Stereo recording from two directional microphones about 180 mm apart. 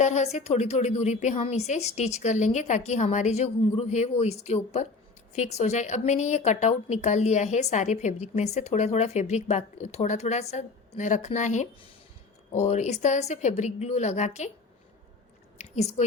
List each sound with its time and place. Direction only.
0.0 s a woman's voice: 40° left (ahead or behind)
15.5 s speech: 40° left (ahead or behind)